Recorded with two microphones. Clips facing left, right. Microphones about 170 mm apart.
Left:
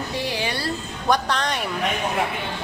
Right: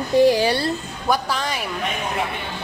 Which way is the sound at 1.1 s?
5° right (ahead or behind).